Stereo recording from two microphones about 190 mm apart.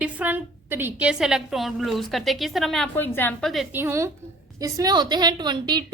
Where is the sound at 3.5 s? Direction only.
5° right (ahead or behind).